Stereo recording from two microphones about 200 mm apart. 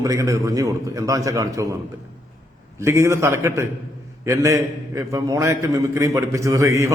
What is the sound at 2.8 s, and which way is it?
A man's voice, 15° right (ahead or behind).